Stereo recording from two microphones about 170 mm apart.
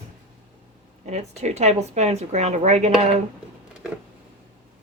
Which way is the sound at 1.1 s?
40° right (ahead or behind).